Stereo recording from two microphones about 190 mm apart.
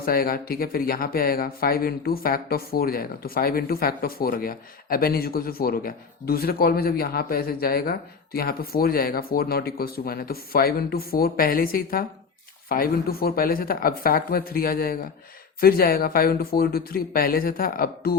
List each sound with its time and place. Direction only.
0.0 s speech: 50° left (ahead or behind)